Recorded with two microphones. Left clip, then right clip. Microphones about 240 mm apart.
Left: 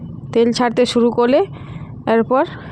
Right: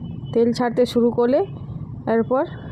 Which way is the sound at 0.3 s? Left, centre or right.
Centre.